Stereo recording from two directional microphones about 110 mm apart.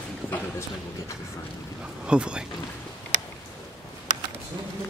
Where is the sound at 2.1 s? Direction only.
10° right (ahead or behind).